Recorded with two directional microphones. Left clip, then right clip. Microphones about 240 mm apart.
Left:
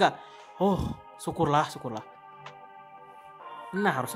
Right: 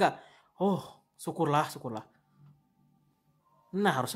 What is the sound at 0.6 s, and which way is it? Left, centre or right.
A man's voice, centre.